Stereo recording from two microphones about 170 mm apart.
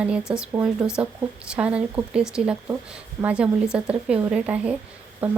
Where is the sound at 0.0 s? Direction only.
5° right (ahead or behind).